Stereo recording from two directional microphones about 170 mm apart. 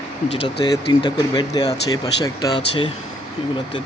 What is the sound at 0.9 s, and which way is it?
Speech, 25° left (ahead or behind).